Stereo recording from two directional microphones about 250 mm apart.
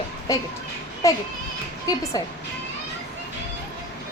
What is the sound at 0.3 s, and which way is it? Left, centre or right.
Female singing, centre.